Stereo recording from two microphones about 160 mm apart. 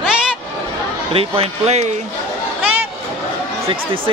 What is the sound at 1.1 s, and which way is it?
Speech, 35° right (ahead or behind).